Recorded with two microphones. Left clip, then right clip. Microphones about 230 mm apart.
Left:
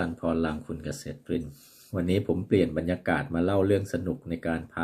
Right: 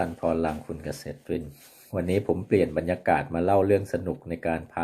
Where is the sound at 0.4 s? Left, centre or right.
Centre.